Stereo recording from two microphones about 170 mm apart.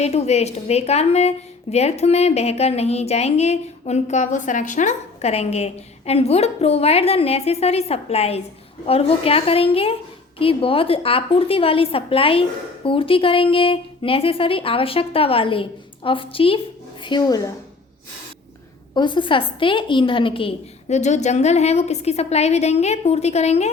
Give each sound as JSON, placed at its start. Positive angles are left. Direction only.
{"t": 0.0, "sound": "a woman's voice", "side_deg": 40}
{"t": 18.9, "sound": "a woman's voice", "side_deg": 30}
{"t": 20.9, "sound": "a woman's voice", "side_deg": 45}